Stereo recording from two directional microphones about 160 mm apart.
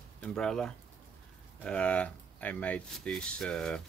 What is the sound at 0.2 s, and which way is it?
Speech, 5° left (ahead or behind).